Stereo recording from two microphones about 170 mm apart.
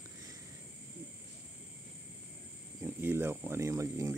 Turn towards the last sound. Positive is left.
turn(degrees=-15)  # may be behind; listen again after turning